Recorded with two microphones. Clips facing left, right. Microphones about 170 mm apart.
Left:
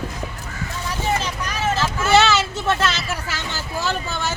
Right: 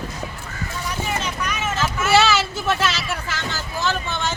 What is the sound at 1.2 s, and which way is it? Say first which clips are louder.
Vehicle: even; 30° left (ahead or behind).